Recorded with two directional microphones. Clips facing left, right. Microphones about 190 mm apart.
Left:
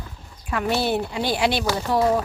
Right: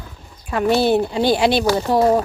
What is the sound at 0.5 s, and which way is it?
Speech, 30° right (ahead or behind).